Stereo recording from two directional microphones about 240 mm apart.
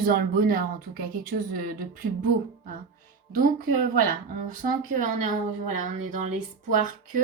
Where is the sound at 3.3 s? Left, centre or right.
Right.